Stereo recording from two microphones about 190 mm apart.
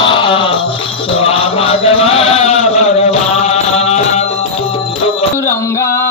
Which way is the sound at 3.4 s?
35° left (ahead or behind).